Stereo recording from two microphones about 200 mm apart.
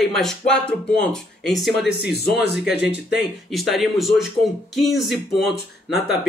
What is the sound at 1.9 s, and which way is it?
Speech, 55° left (ahead or behind).